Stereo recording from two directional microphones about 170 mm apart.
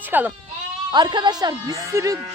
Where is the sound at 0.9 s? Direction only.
25° right (ahead or behind).